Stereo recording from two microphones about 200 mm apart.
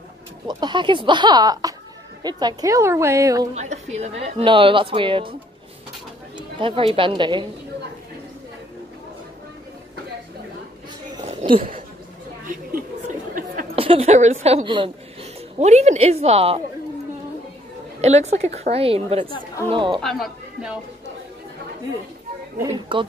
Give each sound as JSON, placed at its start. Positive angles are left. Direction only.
{"t": 0.5, "sound": "a woman's voice", "side_deg": -20}
{"t": 3.5, "sound": "a woman's voice", "side_deg": -35}
{"t": 6.3, "sound": "speech", "side_deg": -25}
{"t": 11.1, "sound": "a sound", "side_deg": -30}
{"t": 13.7, "sound": "a woman's voice", "side_deg": -30}
{"t": 18.0, "sound": "a woman's voice", "side_deg": -35}
{"t": 20.0, "sound": "speech", "side_deg": 0}
{"t": 22.9, "sound": "a woman's voice", "side_deg": -25}